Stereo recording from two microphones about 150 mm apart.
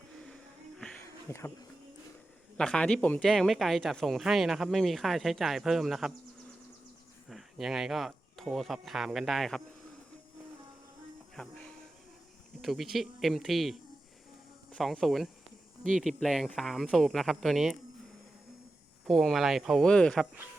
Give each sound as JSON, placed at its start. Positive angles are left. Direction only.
{"t": 1.3, "sound": "speech", "side_deg": 20}
{"t": 2.6, "sound": "speech", "side_deg": 5}
{"t": 7.3, "sound": "speech", "side_deg": 0}
{"t": 11.3, "sound": "music", "side_deg": 5}
{"t": 12.6, "sound": "speech", "side_deg": 0}
{"t": 19.0, "sound": "speech", "side_deg": 0}